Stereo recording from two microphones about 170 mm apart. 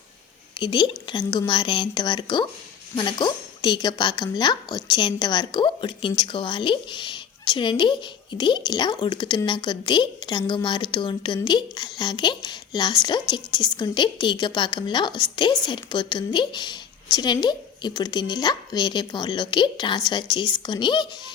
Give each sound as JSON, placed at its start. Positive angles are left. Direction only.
{"t": 0.6, "sound": "a woman's voice", "side_deg": 30}